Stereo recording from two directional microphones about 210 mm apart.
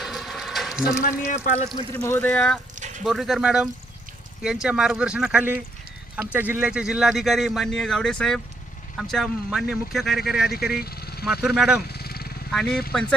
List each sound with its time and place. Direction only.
0.0 s a sound: centre (ahead or behind)
1.7 s speech: 15° left (ahead or behind); by 10.5 s centre (ahead or behind)
10.8 s vehicle: 45° left (ahead or behind)
11.3 s speech: 5° right (ahead or behind)
11.9 s vehicle: 50° left (ahead or behind)
12.5 s speech: centre (ahead or behind)